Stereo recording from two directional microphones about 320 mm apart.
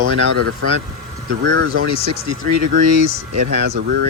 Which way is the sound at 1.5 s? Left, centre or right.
Right.